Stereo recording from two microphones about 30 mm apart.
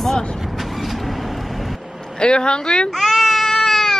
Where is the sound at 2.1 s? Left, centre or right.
Left.